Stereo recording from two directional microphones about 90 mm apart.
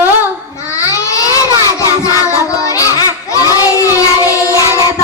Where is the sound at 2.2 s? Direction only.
35° left (ahead or behind).